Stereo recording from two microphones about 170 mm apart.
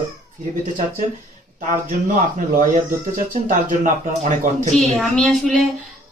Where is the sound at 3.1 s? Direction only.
50° right (ahead or behind).